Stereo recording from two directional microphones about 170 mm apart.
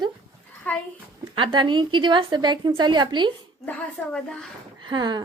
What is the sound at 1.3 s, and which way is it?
A woman's voice, 30° right (ahead or behind).